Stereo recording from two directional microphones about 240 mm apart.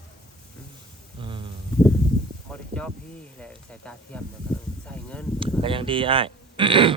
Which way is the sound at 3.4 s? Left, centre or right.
Centre.